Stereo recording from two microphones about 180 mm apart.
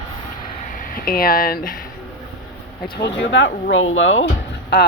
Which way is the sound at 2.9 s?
75° left (ahead or behind).